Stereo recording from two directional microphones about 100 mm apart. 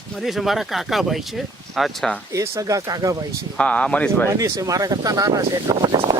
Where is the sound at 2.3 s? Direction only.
35° right (ahead or behind).